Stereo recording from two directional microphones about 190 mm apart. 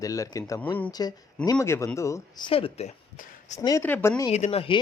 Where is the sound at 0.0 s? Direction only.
15° left (ahead or behind); by 3.6 s 35° left (ahead or behind).